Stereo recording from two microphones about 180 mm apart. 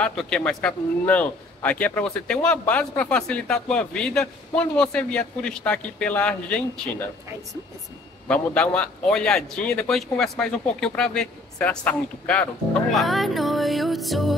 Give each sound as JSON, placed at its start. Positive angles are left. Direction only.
{"t": 0.0, "sound": "a man's voice", "side_deg": 5}
{"t": 8.3, "sound": "a man's voice", "side_deg": 5}